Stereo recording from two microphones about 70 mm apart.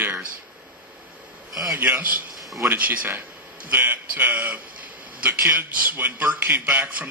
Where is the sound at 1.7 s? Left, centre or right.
Right.